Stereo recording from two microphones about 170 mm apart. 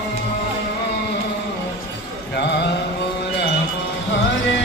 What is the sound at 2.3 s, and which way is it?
Mantra, 80° left.